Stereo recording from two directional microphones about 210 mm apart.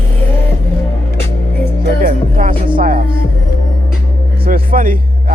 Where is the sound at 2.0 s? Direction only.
40° right (ahead or behind).